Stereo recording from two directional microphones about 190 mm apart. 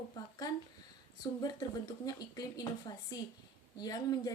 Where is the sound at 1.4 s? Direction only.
20° left (ahead or behind).